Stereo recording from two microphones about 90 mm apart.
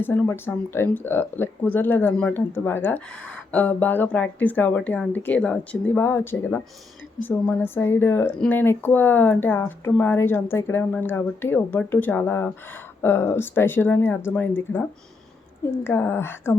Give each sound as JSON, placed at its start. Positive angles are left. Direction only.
{"t": 0.0, "sound": "speech", "side_deg": 25}
{"t": 6.0, "sound": "speech", "side_deg": 30}